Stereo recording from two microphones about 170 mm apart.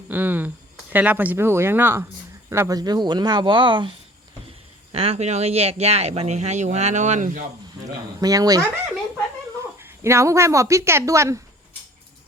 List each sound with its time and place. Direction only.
0.1 s a sound: 10° right (ahead or behind)
0.9 s a woman's voice: 10° right (ahead or behind); by 7.4 s 50° right (ahead or behind)
8.2 s speech: 20° right (ahead or behind)
9.7 s a woman's voice: 15° right (ahead or behind)